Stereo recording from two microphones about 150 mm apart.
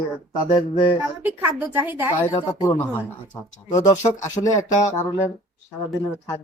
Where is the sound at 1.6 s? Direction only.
15° right (ahead or behind).